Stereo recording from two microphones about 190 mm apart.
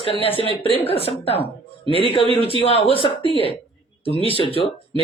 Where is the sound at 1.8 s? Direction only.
30° right (ahead or behind).